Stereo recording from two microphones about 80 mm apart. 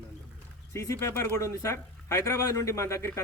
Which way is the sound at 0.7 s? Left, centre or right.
Left.